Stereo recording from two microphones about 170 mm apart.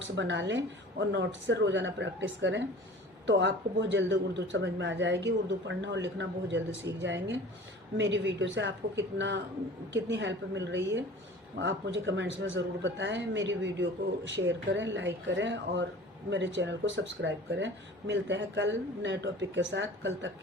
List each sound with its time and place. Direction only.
0.0 s speech: 90° right